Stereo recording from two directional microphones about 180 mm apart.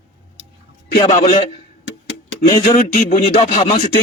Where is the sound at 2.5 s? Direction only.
45° left (ahead or behind).